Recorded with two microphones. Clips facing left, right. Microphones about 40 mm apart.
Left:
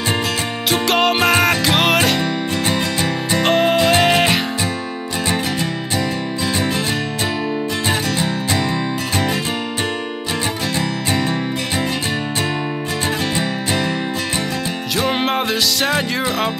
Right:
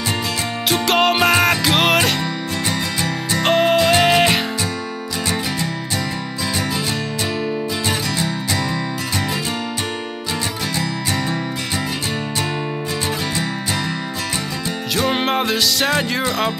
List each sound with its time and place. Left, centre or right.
0.7 s music: centre
2.7 s music: left
3.4 s music: centre
15.0 s music: centre